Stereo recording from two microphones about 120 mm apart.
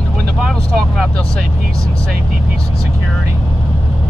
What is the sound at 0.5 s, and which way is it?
Vehicle, 5° left (ahead or behind).